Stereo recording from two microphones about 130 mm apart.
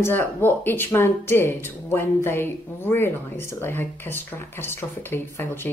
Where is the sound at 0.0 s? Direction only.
15° left (ahead or behind).